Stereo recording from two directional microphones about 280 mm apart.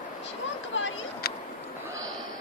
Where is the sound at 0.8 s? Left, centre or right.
Left.